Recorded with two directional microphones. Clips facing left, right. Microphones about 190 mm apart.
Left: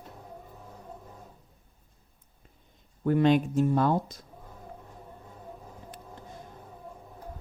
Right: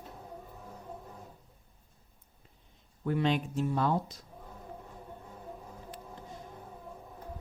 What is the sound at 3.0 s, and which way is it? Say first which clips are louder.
Speech: left 7 dB; 50° left (ahead or behind).